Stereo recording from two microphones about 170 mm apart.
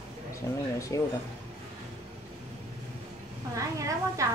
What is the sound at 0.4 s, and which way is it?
Speech, 15° left (ahead or behind).